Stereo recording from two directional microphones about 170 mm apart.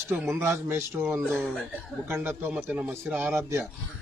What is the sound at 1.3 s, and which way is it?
Speech, centre (ahead or behind).